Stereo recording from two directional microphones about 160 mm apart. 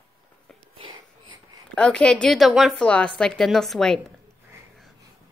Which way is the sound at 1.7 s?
5° left (ahead or behind).